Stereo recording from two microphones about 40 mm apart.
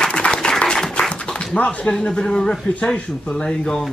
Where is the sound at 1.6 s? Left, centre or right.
Left.